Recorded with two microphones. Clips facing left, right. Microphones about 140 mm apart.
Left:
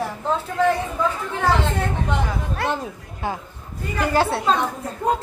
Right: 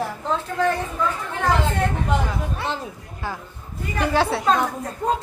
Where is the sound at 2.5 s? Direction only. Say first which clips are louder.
Left 3 dB; 60° left (ahead or behind).